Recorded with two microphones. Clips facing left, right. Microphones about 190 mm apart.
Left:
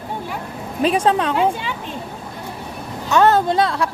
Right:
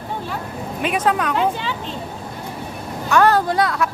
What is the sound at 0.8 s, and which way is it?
Speech, 30° left (ahead or behind).